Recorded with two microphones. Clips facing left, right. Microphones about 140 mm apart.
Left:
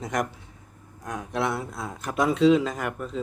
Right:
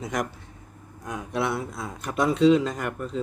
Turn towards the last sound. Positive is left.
turn(degrees=0)  # may be behind; listen again after turning